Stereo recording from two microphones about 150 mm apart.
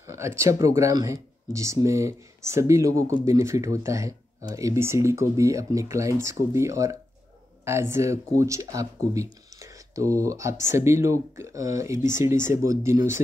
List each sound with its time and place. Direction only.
0.0 s speech: 20° right (ahead or behind)